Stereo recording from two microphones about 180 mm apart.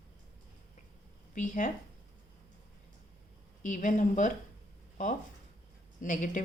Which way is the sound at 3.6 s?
45° left (ahead or behind).